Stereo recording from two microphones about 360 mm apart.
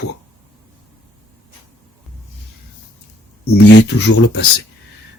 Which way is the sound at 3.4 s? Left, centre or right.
Left.